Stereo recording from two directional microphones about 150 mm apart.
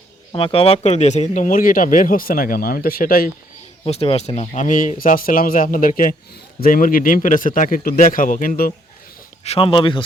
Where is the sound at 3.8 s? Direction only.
40° left (ahead or behind); by 9.3 s 75° left (ahead or behind).